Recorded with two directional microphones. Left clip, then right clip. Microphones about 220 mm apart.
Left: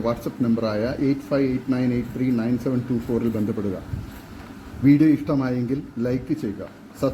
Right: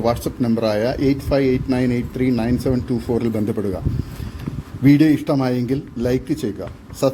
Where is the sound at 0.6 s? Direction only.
50° right (ahead or behind).